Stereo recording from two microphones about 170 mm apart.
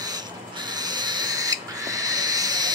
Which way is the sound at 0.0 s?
25° right (ahead or behind).